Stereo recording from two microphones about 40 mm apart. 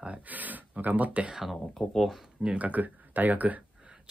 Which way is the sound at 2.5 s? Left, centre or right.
Right.